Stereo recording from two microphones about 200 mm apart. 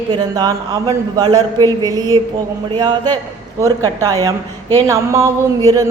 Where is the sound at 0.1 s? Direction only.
20° right (ahead or behind).